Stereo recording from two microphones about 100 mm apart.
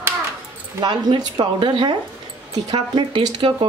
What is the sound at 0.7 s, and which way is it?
Speech, 45° right (ahead or behind).